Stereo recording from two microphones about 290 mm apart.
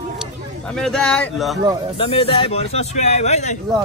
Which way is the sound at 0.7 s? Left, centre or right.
Centre.